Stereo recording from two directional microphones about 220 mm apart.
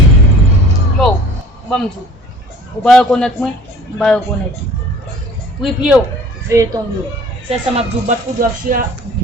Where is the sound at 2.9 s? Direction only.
5° left (ahead or behind).